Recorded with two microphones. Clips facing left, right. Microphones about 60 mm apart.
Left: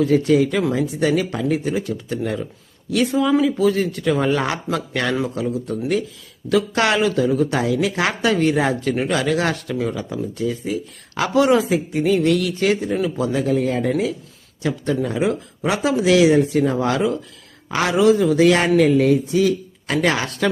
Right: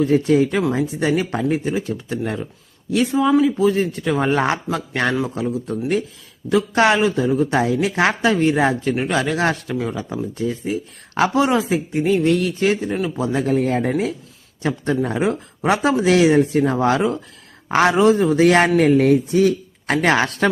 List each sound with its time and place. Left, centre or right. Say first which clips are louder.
0.0 s speech: even; right
10.4 s speech: even; right
12.9 s speech: left 1 dB; centre
13.3 s speech: right 3 dB; right